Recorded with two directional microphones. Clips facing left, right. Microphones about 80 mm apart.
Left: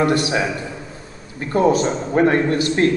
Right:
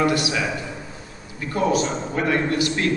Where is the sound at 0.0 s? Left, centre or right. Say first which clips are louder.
Left 3 dB; left.